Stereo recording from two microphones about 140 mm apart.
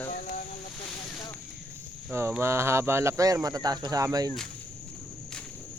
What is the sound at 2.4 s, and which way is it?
Speech, 20° right (ahead or behind).